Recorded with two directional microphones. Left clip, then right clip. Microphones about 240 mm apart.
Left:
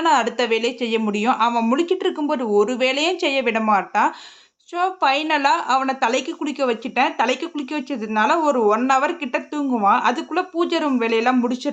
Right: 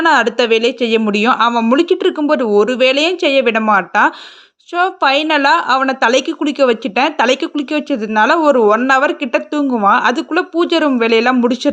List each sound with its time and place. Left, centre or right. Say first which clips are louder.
0.0 s a woman's voice: right 6 dB; right